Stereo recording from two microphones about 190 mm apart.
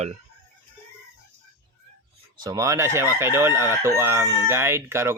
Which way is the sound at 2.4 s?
20° right (ahead or behind).